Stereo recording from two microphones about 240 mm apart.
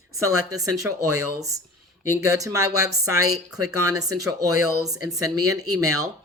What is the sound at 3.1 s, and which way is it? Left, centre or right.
Speech, right.